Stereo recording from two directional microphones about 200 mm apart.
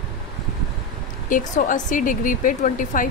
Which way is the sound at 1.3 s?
40° left (ahead or behind).